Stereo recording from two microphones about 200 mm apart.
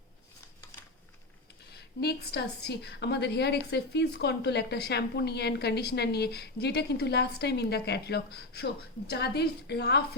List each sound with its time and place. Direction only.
1.7 s a woman's voice: 55° left (ahead or behind)